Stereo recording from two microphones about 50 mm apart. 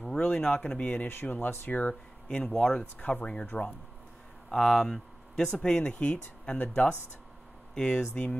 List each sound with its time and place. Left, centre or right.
0.0 s speech: centre
0.8 s speech: left
2.2 s speech: centre
2.8 s speech: left
4.5 s speech: centre; by 7.0 s left
7.7 s speech: centre